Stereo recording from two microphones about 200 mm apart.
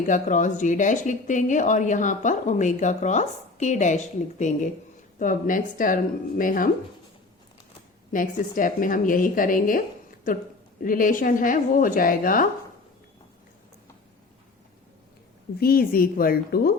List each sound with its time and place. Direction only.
0.1 s a woman's voice: 40° left (ahead or behind)
8.1 s a woman's voice: 40° left (ahead or behind)
10.8 s a woman's voice: 45° left (ahead or behind)
15.6 s a woman's voice: 45° left (ahead or behind)